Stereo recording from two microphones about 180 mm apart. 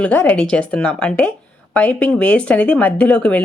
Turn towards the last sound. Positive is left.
turn(degrees=5)  # may be behind; listen again after turning